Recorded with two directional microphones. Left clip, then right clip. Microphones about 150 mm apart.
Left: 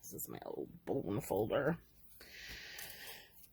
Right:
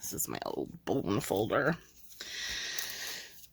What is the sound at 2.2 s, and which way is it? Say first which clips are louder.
Wheeze: right 13 dB; 25° right (ahead or behind).